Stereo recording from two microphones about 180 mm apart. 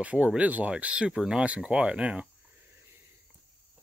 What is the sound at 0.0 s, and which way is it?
Speech, 5° right (ahead or behind).